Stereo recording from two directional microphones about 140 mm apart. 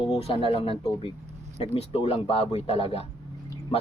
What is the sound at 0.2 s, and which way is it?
A man's voice, 45° left (ahead or behind).